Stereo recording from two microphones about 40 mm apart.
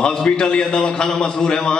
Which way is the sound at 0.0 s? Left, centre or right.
Centre.